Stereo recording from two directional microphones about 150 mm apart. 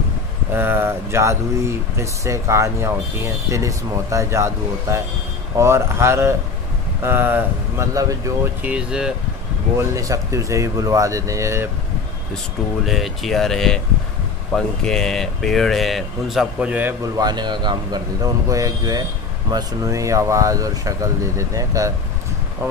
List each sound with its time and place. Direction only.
0.5 s speech: 15° right (ahead or behind)
8.6 s speech: 5° right (ahead or behind)
9.8 s speech: 20° right (ahead or behind)
12.8 s speech: centre (ahead or behind)
17.0 s speech: 25° right (ahead or behind)